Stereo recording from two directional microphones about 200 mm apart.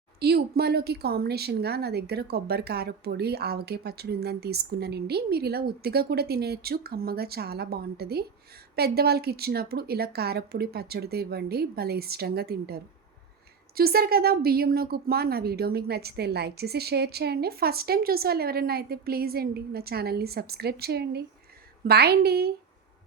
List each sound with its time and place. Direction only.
0.2 s a woman's voice: 55° right (ahead or behind)